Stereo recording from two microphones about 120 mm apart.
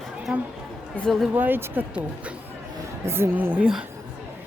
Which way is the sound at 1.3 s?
15° right (ahead or behind).